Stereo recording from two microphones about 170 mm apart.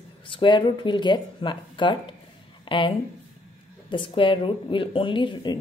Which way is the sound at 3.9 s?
30° left (ahead or behind).